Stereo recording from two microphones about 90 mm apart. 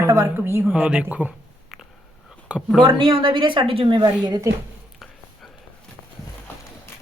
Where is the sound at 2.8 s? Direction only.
70° right (ahead or behind).